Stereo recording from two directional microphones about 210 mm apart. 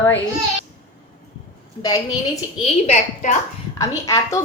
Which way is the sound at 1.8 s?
15° left (ahead or behind).